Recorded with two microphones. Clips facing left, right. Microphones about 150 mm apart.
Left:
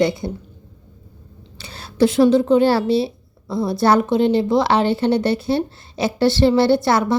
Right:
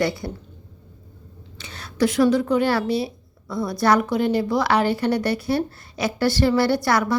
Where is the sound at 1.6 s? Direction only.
30° left (ahead or behind).